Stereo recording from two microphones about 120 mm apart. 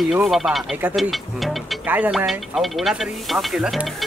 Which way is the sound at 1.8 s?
15° right (ahead or behind).